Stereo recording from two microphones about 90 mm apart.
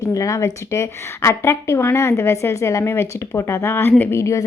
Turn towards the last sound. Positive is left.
turn(degrees=35)  # may be behind; listen again after turning